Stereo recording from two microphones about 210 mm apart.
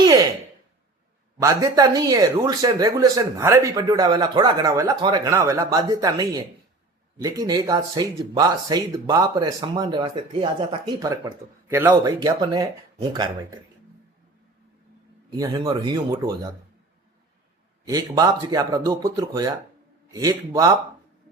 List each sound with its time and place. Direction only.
0.0 s a sound: 15° right (ahead or behind)
1.4 s a man's voice: 15° right (ahead or behind)
15.4 s speech: 20° right (ahead or behind)
17.8 s a man's voice: 15° right (ahead or behind)